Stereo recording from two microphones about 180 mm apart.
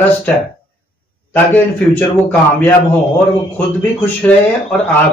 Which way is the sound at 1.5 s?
10° left (ahead or behind).